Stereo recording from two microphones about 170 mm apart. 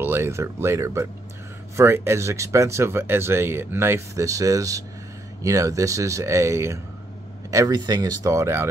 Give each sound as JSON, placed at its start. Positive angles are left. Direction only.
{"t": 0.0, "sound": "speech", "side_deg": -15}